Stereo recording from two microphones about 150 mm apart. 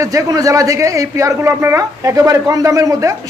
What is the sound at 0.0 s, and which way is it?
Speech, 20° right (ahead or behind).